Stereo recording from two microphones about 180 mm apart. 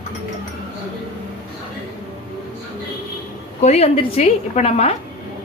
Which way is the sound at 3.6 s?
35° left (ahead or behind).